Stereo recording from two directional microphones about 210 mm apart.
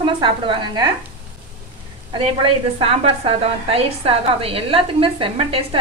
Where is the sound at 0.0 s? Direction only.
25° right (ahead or behind).